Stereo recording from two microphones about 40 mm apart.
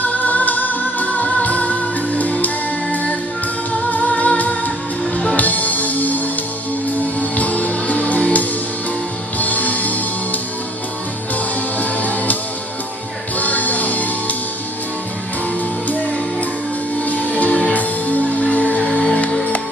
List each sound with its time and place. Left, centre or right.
0.0 s music: left
11.8 s music: left
13.4 s music: left
17.0 s music: left
18.9 s music: left